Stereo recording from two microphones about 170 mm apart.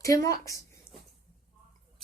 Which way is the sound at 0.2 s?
20° left (ahead or behind).